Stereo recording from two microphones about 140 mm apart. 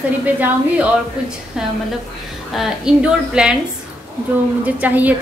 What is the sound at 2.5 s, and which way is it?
A woman's voice, 5° right (ahead or behind).